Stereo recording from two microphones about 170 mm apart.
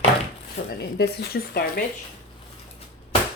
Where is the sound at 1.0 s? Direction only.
70° left (ahead or behind).